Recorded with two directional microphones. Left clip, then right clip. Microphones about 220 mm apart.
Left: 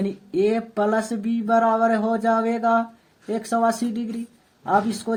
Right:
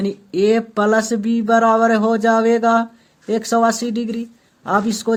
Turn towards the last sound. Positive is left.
turn(degrees=-35)  # may be behind; listen again after turning